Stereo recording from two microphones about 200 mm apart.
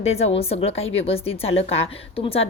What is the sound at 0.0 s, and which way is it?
A woman's voice, 30° left (ahead or behind).